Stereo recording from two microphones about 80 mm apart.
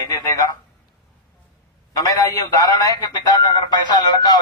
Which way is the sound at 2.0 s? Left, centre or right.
Left.